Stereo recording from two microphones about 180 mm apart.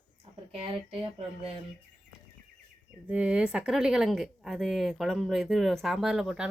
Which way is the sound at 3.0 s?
5° right (ahead or behind).